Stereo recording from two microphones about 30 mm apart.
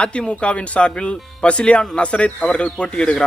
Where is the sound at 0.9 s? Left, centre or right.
Left.